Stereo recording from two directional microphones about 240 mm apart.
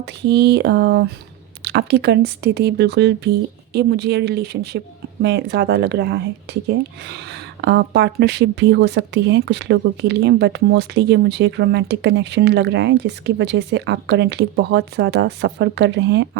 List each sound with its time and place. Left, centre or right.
0.0 s speech: right